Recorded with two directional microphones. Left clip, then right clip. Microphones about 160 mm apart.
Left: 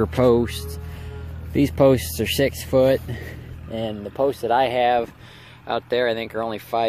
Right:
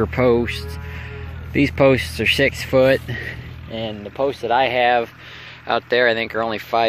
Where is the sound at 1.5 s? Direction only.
30° left (ahead or behind).